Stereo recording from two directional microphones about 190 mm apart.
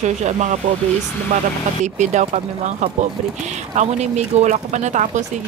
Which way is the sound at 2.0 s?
40° right (ahead or behind).